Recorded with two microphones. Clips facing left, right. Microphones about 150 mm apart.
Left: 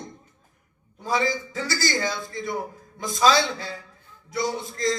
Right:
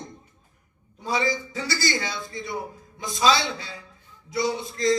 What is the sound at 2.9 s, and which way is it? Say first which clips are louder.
Speech: left 2 dB; 45° left (ahead or behind).